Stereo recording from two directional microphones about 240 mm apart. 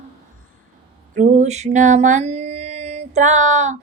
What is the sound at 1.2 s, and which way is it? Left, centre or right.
Mantra, right.